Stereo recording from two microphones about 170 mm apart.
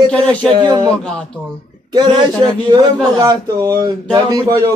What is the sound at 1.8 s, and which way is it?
A man's voice, 25° right (ahead or behind).